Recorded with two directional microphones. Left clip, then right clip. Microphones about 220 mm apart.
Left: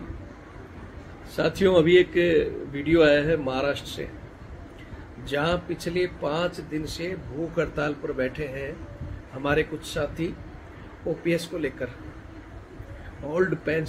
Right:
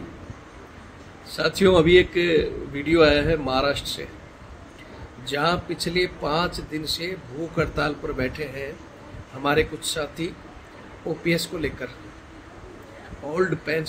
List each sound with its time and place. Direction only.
1.6 s a man's voice: 15° right (ahead or behind)
5.3 s a man's voice: 15° right (ahead or behind)
13.3 s a man's voice: 15° right (ahead or behind)